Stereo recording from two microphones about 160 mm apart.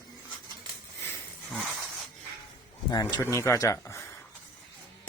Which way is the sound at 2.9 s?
25° left (ahead or behind).